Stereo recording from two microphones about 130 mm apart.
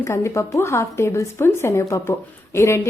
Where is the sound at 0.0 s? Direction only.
20° left (ahead or behind).